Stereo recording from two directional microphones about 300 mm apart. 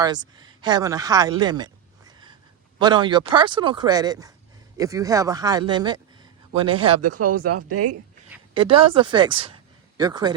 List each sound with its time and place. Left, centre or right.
0.0 s speech: centre
7.0 s speech: right
8.5 s speech: centre